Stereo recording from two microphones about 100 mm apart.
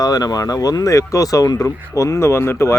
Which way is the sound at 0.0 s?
40° left (ahead or behind).